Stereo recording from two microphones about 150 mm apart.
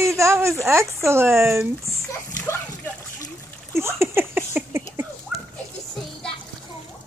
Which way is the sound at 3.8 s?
15° right (ahead or behind).